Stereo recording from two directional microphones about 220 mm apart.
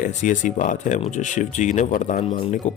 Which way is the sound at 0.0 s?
35° left (ahead or behind).